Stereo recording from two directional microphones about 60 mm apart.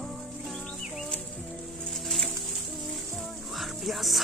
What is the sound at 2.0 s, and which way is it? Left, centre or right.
Music, centre.